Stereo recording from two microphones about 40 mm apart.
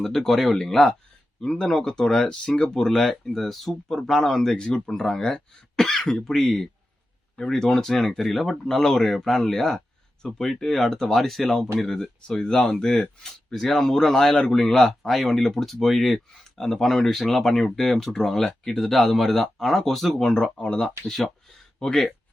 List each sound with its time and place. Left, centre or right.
0.0 s speech: centre
2.2 s speech: left
20.4 s speech: left